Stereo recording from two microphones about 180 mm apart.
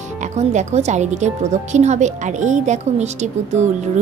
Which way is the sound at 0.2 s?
40° right (ahead or behind).